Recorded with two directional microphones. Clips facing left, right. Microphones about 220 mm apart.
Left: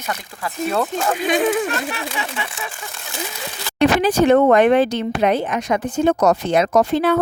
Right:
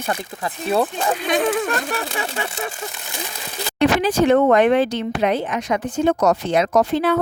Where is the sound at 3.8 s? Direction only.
45° left (ahead or behind).